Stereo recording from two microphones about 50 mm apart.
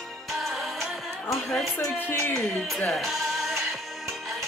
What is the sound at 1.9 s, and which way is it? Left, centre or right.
Speech, left.